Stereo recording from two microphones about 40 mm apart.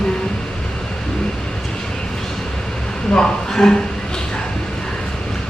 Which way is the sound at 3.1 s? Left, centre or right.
Centre.